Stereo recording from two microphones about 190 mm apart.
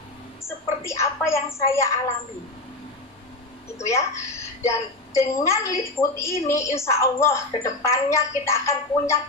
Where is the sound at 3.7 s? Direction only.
15° left (ahead or behind).